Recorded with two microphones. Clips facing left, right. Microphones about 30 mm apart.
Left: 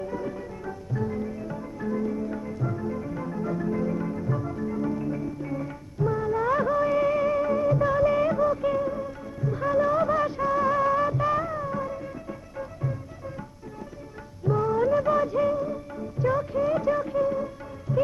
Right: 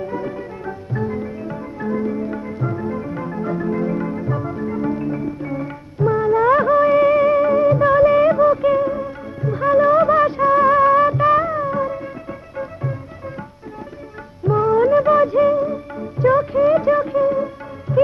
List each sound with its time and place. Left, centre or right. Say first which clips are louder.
0.0 s music: right 6 dB; right
14.4 s music: right 8 dB; right